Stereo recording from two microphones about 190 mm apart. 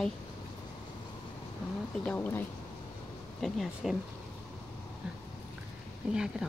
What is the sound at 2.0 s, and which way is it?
Speech, 10° left (ahead or behind).